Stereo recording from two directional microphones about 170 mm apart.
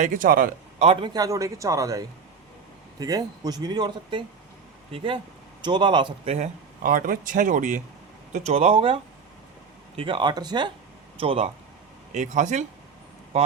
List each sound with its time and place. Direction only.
0.0 s speech: 50° right (ahead or behind)
0.8 s a man's voice: 30° right (ahead or behind)
6.8 s speech: 55° right (ahead or behind)
8.3 s a man's voice: 40° right (ahead or behind)
12.1 s speech: 45° right (ahead or behind)